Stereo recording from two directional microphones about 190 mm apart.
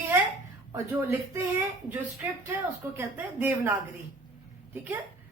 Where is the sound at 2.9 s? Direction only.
10° right (ahead or behind).